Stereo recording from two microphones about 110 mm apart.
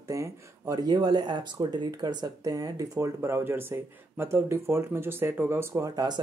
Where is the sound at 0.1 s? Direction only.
30° right (ahead or behind).